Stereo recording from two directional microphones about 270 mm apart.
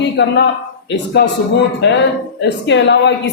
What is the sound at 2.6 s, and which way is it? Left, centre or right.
Speech, left.